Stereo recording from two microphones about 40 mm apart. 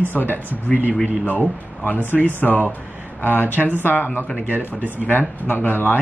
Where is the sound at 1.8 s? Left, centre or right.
Left.